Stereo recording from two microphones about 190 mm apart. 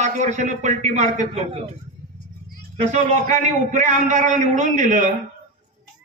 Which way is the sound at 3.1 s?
40° right (ahead or behind).